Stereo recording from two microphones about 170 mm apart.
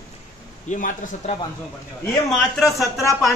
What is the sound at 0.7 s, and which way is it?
Speech, 50° left (ahead or behind).